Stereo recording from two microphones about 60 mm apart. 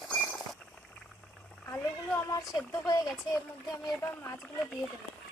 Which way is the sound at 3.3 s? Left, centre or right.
Left.